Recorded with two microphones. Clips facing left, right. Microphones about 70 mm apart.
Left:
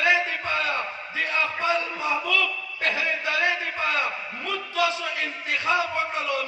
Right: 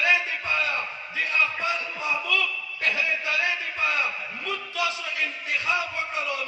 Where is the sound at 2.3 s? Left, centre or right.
Left.